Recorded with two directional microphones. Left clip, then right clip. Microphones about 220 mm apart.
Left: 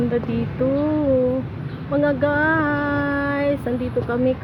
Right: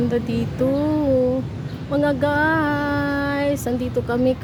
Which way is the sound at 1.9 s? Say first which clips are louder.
Even; 5° right (ahead or behind).